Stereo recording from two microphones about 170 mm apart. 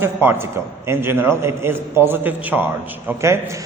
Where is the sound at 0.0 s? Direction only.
15° right (ahead or behind).